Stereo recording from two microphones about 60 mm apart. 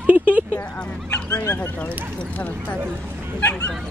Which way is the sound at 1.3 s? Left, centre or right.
Left.